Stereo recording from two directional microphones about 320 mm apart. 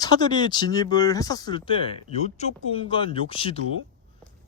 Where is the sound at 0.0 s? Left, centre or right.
Centre.